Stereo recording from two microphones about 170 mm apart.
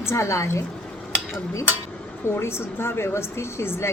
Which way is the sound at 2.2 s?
15° left (ahead or behind).